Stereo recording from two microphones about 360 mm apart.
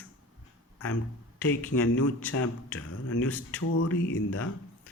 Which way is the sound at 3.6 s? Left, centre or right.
Left.